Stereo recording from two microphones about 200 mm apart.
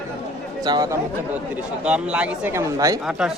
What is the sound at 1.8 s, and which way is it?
Speech, 5° right (ahead or behind).